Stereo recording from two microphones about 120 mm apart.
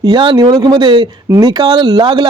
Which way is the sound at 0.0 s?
40° right (ahead or behind).